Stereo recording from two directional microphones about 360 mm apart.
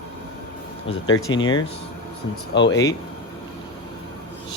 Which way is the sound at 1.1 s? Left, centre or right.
Left.